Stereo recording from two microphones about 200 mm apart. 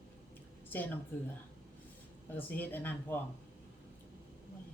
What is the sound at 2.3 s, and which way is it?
Speech, 10° left (ahead or behind).